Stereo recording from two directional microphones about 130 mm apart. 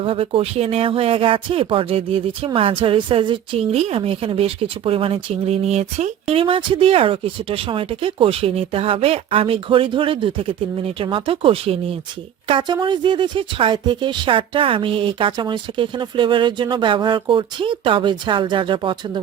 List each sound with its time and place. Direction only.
0.0 s speech: 45° right (ahead or behind)
12.5 s speech: 35° right (ahead or behind)